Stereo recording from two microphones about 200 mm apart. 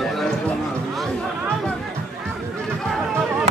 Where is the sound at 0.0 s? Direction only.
Centre (ahead or behind).